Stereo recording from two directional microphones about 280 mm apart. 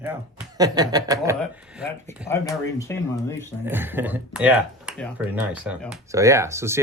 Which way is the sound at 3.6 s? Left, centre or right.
Centre.